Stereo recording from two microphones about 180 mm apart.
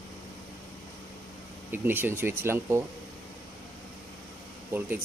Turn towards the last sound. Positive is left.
turn(degrees=-15)  # may be behind; listen again after turning